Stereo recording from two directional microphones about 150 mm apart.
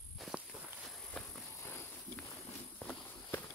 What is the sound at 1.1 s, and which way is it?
Walk, 10° left (ahead or behind).